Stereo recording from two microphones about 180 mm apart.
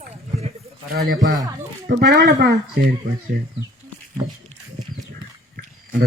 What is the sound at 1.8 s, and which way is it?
Speech, 70° right (ahead or behind).